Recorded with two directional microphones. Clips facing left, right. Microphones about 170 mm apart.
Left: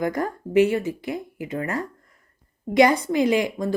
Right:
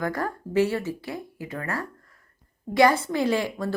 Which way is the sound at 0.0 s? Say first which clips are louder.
Left 3 dB; 20° left (ahead or behind).